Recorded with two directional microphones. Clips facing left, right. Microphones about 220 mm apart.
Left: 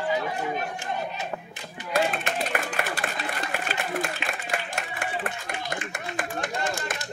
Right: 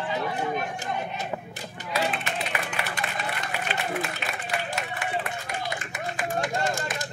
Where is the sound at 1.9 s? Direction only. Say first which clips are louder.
Left 3 dB; 45° left (ahead or behind).